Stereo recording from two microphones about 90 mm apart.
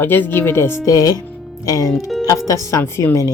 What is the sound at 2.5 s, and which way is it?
Speech, 35° left (ahead or behind).